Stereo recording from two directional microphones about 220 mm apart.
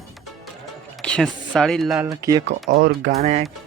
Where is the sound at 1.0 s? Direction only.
5° left (ahead or behind).